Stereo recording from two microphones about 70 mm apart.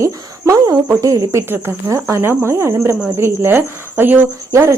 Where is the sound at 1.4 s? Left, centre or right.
Right.